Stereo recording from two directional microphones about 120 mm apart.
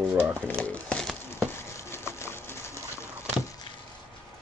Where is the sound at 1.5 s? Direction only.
20° left (ahead or behind).